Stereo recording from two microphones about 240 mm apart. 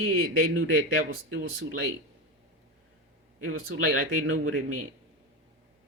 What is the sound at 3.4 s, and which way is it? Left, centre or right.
Speech, right.